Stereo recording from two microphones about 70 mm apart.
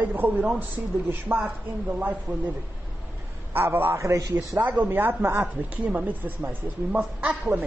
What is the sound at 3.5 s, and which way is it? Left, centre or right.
Speech, right.